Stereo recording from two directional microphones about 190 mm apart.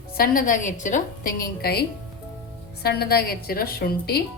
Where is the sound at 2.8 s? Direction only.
55° left (ahead or behind).